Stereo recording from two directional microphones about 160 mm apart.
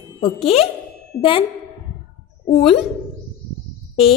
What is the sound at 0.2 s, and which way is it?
Speech, 35° left (ahead or behind).